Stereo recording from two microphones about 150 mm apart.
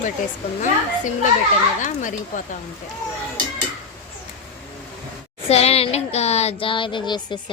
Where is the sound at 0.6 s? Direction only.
55° left (ahead or behind).